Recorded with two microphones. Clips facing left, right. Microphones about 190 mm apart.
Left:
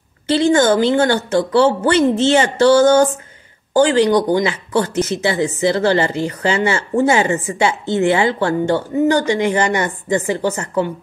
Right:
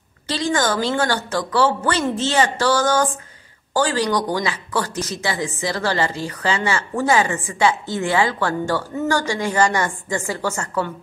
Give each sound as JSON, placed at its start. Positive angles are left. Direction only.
{"t": 0.3, "sound": "speech", "side_deg": 25}